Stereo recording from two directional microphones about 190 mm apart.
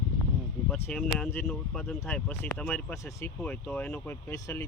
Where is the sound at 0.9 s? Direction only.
5° left (ahead or behind).